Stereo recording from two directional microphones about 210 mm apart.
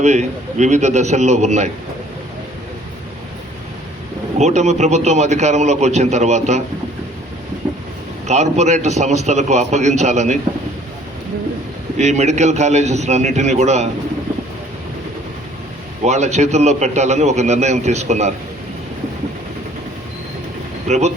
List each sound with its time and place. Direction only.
0.0 s a man's voice: 35° right (ahead or behind)
4.4 s a man's voice: 35° right (ahead or behind)
8.3 s a man's voice: 35° right (ahead or behind)
11.9 s a man's voice: 35° right (ahead or behind)
16.0 s a man's voice: 35° right (ahead or behind)
20.8 s speech: 30° right (ahead or behind)